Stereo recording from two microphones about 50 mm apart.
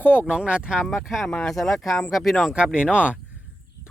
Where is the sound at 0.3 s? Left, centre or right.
Centre.